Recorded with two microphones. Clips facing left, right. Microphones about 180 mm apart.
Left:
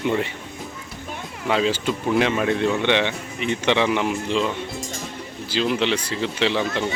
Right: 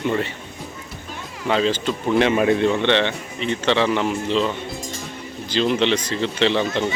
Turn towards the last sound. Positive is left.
turn(degrees=5)  # may be behind; listen again after turning